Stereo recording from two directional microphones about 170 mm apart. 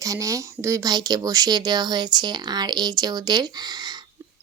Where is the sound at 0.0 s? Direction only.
20° right (ahead or behind).